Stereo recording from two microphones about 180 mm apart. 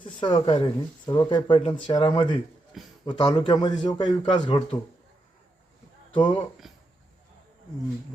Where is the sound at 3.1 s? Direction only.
25° left (ahead or behind).